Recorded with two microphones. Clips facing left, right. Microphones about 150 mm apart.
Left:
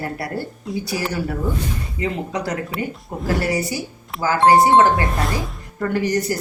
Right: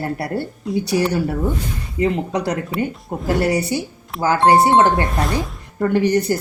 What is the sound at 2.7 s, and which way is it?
Speech, centre (ahead or behind).